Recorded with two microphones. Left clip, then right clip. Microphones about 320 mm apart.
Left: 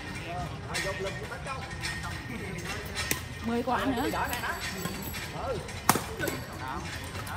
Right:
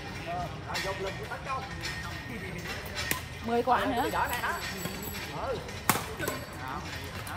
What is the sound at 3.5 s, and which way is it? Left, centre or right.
Speech, right.